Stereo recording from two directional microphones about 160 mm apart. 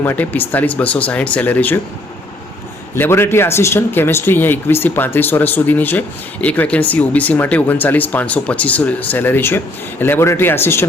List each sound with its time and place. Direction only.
0.0 s speech: 15° left (ahead or behind)
2.9 s speech: 15° left (ahead or behind)